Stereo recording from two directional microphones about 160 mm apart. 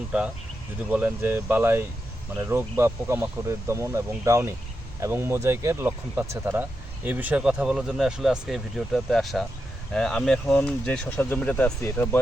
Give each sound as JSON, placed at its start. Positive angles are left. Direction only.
{"t": 0.1, "sound": "speech", "side_deg": -5}